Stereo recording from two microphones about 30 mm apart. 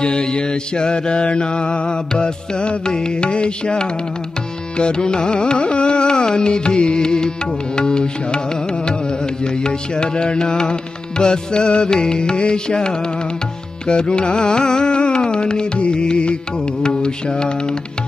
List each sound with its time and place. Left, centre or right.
0.0 s mantra: left
4.7 s carnatic music: left
9.4 s carnatic music: left
13.8 s mantra: left